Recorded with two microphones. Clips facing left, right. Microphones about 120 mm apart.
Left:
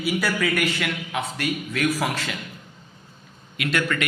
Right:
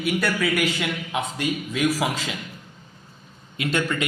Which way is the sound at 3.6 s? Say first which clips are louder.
Even; 25° right (ahead or behind).